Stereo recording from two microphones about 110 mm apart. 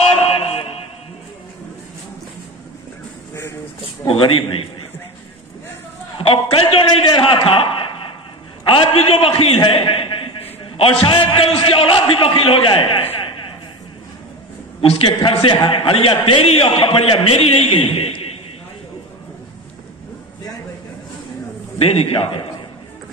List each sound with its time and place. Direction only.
0.3 s music: 65° left (ahead or behind)
4.1 s a man's voice: 50° left (ahead or behind)
6.1 s a man's voice: 55° left (ahead or behind)
14.8 s a man's voice: 50° left (ahead or behind)
21.7 s a man's voice: 60° left (ahead or behind)